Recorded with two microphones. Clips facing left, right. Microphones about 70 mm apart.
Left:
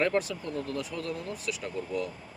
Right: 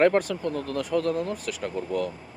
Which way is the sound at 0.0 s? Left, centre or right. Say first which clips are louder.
Right 7 dB; right.